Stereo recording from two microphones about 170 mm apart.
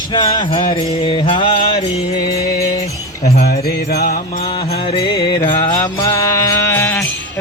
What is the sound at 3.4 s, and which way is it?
Music, 65° left (ahead or behind).